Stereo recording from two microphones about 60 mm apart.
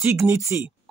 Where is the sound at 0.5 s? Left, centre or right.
Right.